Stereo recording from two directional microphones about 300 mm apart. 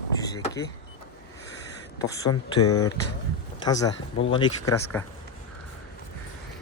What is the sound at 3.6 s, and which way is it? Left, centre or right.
Speech, centre.